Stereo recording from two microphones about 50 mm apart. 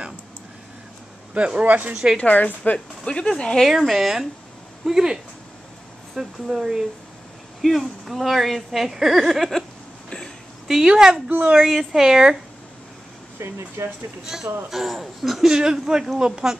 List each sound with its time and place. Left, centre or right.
1.3 s speech: right
2.1 s a woman's voice: left
3.1 s speech: centre
3.6 s speech: centre
10.0 s a sound: centre
10.7 s speech: centre
11.2 s speech: right
11.7 s speech: centre
13.4 s speech: right
14.2 s speech: centre